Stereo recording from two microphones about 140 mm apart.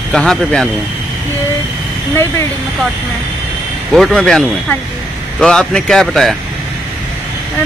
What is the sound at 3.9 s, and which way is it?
Speech, centre (ahead or behind).